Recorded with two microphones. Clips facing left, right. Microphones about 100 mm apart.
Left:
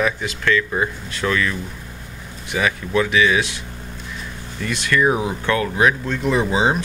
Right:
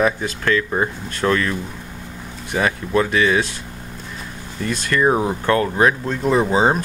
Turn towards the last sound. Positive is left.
turn(degrees=-40)  # may be behind; listen again after turning